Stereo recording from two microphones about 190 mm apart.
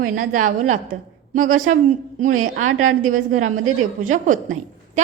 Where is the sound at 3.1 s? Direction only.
40° right (ahead or behind).